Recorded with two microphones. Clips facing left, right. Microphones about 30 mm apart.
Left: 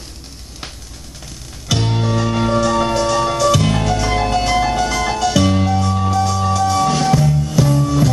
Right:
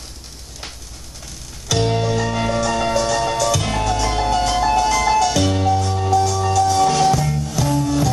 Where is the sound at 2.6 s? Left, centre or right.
Left.